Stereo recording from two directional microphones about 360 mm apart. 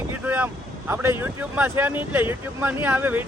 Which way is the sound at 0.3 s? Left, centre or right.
Centre.